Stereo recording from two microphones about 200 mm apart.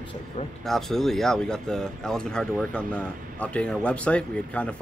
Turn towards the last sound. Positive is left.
turn(degrees=5)  # may be behind; listen again after turning